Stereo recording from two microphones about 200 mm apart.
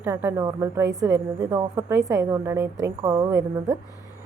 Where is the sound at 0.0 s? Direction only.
10° right (ahead or behind).